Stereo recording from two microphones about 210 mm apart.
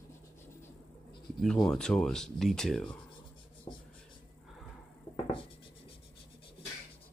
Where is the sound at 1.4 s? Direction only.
5° left (ahead or behind).